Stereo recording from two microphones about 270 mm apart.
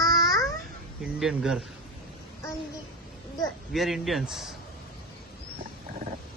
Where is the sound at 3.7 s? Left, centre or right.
Centre.